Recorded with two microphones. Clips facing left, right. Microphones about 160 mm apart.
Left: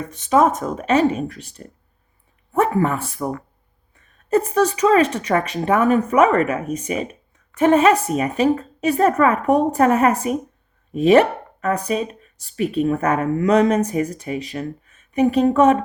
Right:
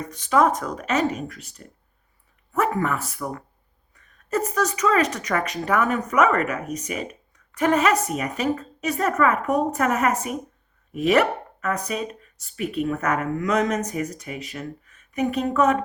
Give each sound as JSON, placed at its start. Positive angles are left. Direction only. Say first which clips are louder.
{"t": 0.0, "sound": "speech", "louder": "left 3 dB", "side_deg": 25}